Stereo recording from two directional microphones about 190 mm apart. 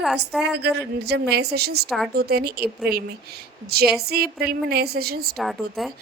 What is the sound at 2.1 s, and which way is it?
A woman's voice, 55° right (ahead or behind).